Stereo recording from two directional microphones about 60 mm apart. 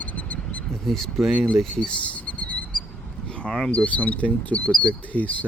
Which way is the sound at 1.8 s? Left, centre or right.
Left.